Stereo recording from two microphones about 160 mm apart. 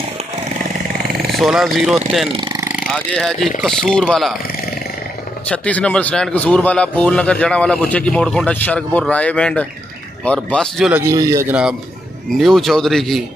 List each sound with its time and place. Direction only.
1.3 s speech: centre (ahead or behind)
2.3 s a sound: 25° right (ahead or behind)
3.4 s speech: centre (ahead or behind)
5.5 s a man's voice: 10° left (ahead or behind)
10.9 s a man's voice: 15° right (ahead or behind)
12.3 s speech: centre (ahead or behind)